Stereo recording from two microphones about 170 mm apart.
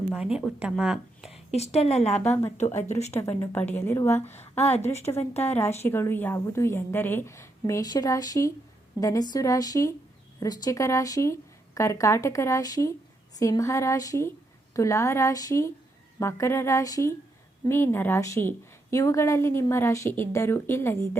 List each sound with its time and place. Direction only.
0.1 s speech: 5° right (ahead or behind)
1.3 s a woman's voice: 40° left (ahead or behind)
2.2 s a woman's voice: 10° left (ahead or behind)
2.8 s speech: 40° left (ahead or behind)
3.1 s a woman's voice: 15° left (ahead or behind)
4.9 s speech: 40° left (ahead or behind)
5.5 s a woman's voice: 15° left (ahead or behind)